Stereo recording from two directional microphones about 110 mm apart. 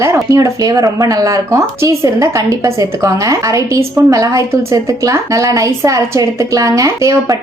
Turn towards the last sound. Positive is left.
turn(degrees=-30)  # may be behind; listen again after turning